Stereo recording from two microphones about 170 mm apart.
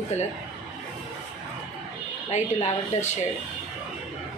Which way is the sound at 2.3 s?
40° left (ahead or behind).